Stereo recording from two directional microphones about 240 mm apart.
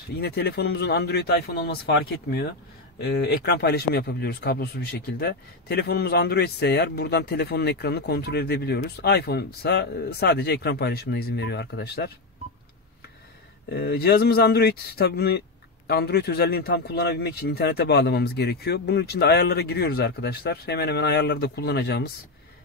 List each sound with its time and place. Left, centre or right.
0.2 s speech: left
13.7 s speech: left